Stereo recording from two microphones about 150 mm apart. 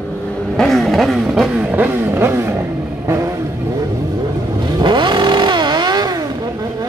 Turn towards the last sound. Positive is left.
turn(degrees=-30)  # may be behind; listen again after turning